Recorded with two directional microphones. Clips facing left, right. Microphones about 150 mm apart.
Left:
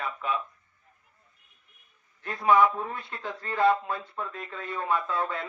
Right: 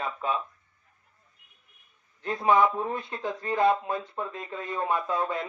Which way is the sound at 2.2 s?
20° right (ahead or behind).